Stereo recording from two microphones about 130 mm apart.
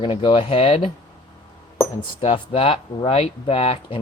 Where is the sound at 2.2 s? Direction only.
45° left (ahead or behind).